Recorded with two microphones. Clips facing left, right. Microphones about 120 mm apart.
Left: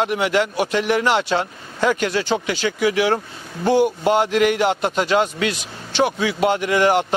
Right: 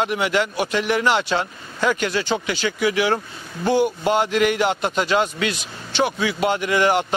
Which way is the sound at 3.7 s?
5° left (ahead or behind).